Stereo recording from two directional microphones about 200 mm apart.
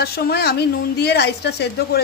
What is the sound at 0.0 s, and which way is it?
A man's voice, 55° left (ahead or behind).